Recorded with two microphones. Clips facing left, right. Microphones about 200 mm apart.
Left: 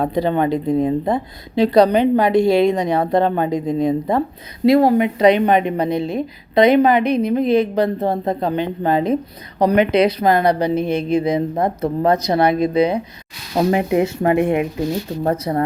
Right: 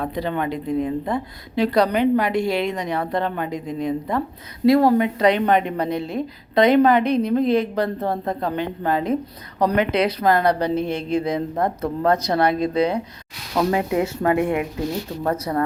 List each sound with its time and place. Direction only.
0.0 s a woman's voice: 30° left (ahead or behind)
4.6 s a woman's voice: 15° left (ahead or behind)